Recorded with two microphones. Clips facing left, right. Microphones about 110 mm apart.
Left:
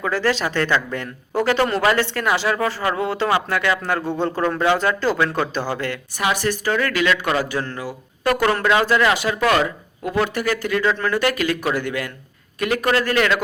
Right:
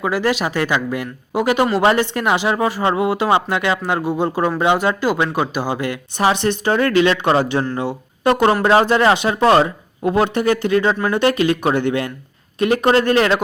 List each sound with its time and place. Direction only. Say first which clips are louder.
0.0 s speech: right 2 dB; 15° right (ahead or behind); by 13.4 s 30° right (ahead or behind)